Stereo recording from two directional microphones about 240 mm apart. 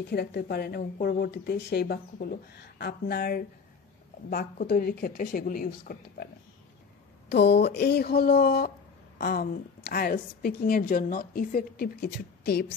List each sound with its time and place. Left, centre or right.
0.1 s a woman's voice: left
7.2 s a woman's voice: left